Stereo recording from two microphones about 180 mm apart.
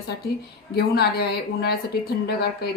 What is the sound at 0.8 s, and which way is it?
A woman's voice, 65° left (ahead or behind).